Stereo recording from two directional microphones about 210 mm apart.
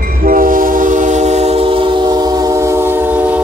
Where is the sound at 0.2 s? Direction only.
40° right (ahead or behind); by 3.0 s 10° right (ahead or behind).